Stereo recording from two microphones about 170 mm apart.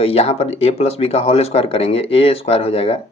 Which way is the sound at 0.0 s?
35° left (ahead or behind).